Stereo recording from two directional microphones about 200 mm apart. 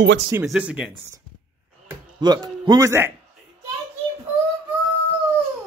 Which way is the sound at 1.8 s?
20° right (ahead or behind).